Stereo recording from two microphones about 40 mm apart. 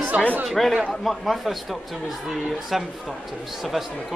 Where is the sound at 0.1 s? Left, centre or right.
Right.